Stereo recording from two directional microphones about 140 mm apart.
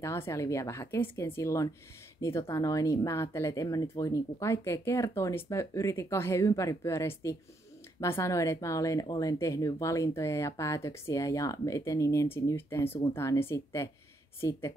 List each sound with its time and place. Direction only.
0.0 s speech: 20° left (ahead or behind)